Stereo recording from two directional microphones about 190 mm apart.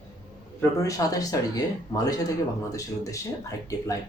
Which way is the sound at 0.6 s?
15° left (ahead or behind).